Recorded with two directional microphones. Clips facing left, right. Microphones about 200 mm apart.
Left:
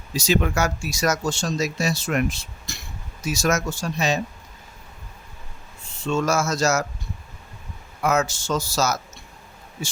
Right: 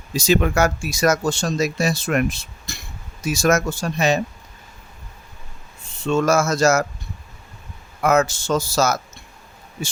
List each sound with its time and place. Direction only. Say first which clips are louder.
0.2 s speech: right 4 dB; 50° right (ahead or behind)
6.1 s speech: right 4 dB; 55° right (ahead or behind)
8.0 s speech: right 4 dB; 55° right (ahead or behind)